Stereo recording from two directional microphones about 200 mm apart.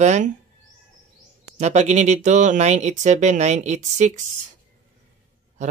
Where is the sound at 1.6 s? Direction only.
35° right (ahead or behind).